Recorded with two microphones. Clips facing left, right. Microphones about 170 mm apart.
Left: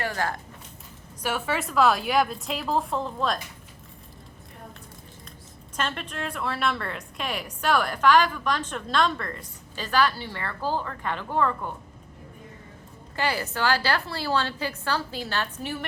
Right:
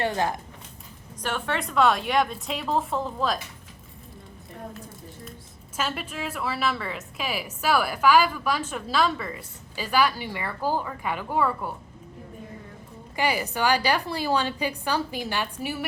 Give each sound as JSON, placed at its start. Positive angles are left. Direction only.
{"t": 0.0, "sound": "speech", "side_deg": -20}
{"t": 1.2, "sound": "a woman's voice", "side_deg": 5}
{"t": 5.7, "sound": "a woman's voice", "side_deg": -5}
{"t": 13.1, "sound": "a woman's voice", "side_deg": -15}